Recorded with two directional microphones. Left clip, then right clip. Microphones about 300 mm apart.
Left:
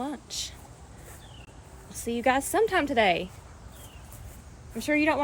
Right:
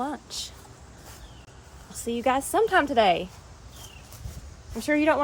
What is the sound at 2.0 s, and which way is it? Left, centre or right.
Speech, centre.